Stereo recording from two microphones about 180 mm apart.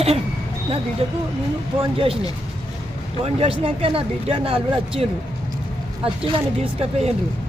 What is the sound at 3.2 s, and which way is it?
Speech, 30° right (ahead or behind).